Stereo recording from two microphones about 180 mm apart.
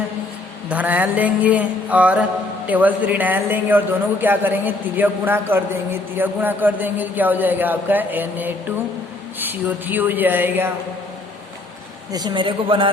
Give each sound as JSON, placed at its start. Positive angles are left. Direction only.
{"t": 0.7, "sound": "a man's voice", "side_deg": -10}
{"t": 12.1, "sound": "a man's voice", "side_deg": -25}